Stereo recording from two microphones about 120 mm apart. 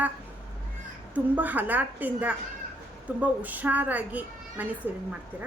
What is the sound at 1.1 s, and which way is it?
A woman's voice, 15° right (ahead or behind).